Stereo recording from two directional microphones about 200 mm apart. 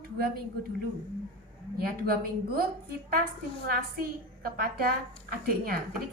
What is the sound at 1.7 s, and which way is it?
Speech, 50° right (ahead or behind).